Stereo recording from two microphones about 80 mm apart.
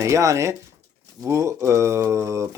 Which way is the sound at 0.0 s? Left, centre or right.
Right.